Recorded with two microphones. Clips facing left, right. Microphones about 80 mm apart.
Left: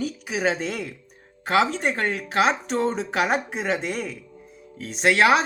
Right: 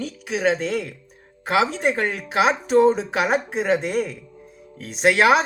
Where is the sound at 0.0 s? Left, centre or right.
Centre.